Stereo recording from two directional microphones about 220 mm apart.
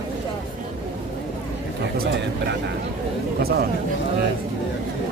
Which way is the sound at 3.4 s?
45° right (ahead or behind).